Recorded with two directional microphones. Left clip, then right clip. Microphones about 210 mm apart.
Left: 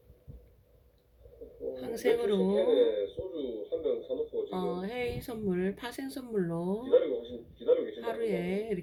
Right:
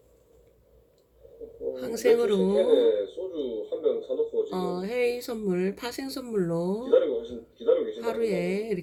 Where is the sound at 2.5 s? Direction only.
45° right (ahead or behind).